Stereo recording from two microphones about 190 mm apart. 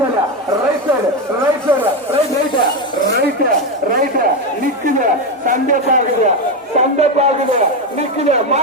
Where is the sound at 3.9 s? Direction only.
50° right (ahead or behind).